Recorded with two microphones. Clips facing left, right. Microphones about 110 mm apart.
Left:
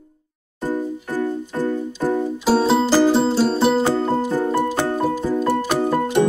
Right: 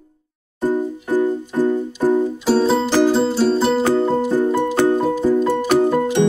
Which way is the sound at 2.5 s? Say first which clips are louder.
Left 1 dB; 5° left (ahead or behind).